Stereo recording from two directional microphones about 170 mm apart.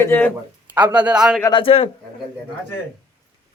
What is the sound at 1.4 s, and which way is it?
Speech, 30° left (ahead or behind).